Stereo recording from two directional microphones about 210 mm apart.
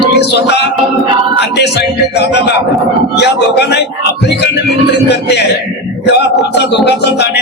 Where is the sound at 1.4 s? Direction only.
55° left (ahead or behind).